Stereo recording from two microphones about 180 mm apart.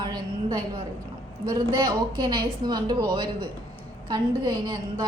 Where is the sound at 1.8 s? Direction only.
25° right (ahead or behind).